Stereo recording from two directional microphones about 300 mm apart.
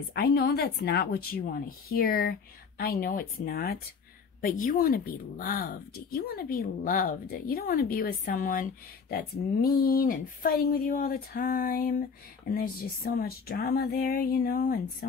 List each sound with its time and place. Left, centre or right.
0.1 s speech: left
9.8 s speech: left